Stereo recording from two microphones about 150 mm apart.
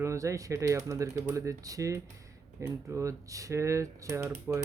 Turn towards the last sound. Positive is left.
turn(degrees=-20)  # may be behind; listen again after turning